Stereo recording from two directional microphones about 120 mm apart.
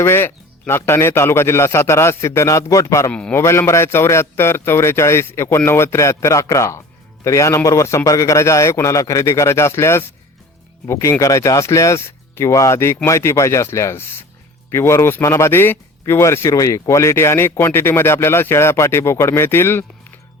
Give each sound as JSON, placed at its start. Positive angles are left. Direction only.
{"t": 0.0, "sound": "a man's voice", "side_deg": 20}
{"t": 3.1, "sound": "a man's voice", "side_deg": 10}
{"t": 3.3, "sound": "a man's voice", "side_deg": 20}